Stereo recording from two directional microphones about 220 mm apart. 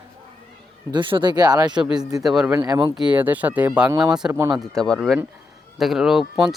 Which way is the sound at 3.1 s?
5° right (ahead or behind).